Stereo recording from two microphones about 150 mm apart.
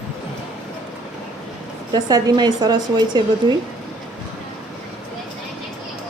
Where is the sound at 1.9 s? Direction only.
25° right (ahead or behind).